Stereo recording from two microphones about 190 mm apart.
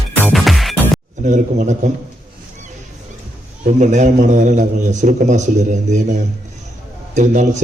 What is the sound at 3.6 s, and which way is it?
A man's voice, 40° right (ahead or behind).